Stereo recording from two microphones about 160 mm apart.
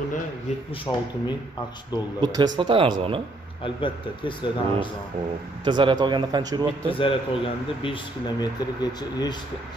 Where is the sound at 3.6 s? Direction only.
30° left (ahead or behind).